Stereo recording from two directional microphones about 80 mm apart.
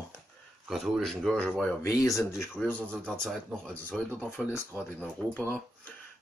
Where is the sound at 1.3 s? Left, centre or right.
Centre.